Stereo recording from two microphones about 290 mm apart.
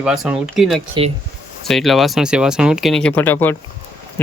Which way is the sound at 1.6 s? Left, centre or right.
Centre.